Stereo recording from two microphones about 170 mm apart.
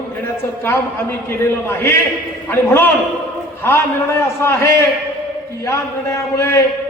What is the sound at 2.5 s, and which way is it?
A man's voice, 10° left (ahead or behind).